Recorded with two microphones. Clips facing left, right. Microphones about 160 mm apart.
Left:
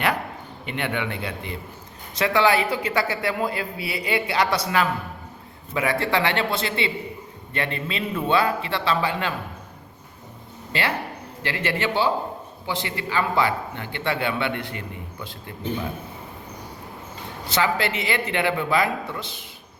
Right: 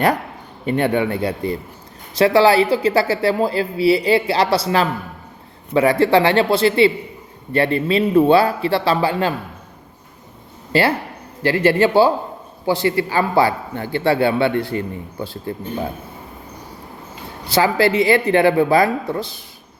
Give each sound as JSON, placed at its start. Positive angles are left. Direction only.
{"t": 0.6, "sound": "a man's voice", "side_deg": -40}
{"t": 10.7, "sound": "a man's voice", "side_deg": -35}
{"t": 17.5, "sound": "a man's voice", "side_deg": -35}